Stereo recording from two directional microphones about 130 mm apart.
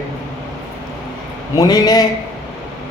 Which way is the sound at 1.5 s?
30° left (ahead or behind).